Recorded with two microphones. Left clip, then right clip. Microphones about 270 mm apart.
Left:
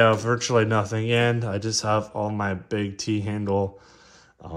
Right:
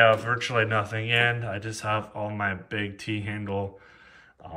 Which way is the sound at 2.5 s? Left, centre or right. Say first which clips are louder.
Left 3 dB; centre.